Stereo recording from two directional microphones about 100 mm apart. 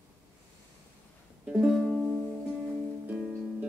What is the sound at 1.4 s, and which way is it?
Music, 10° right (ahead or behind).